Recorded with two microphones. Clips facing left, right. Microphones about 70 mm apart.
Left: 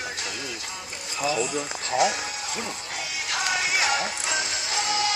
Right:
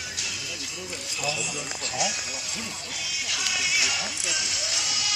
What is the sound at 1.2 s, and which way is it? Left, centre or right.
Speech, left.